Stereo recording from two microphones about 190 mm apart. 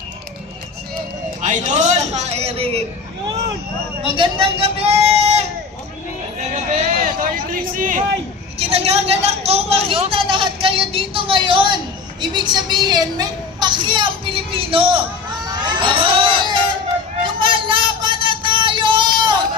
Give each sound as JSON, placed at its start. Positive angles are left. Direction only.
{"t": 1.4, "sound": "a man's voice", "side_deg": -40}
{"t": 4.0, "sound": "a man's voice", "side_deg": -25}
{"t": 6.5, "sound": "hubbub", "side_deg": -40}
{"t": 8.5, "sound": "a man's voice", "side_deg": -30}
{"t": 15.4, "sound": "music", "side_deg": -25}
{"t": 17.2, "sound": "a sound", "side_deg": -25}